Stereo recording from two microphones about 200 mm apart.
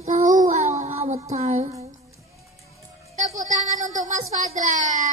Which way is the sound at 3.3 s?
40° right (ahead or behind).